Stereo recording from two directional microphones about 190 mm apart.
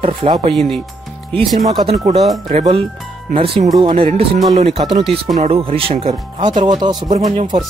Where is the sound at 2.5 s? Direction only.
35° right (ahead or behind).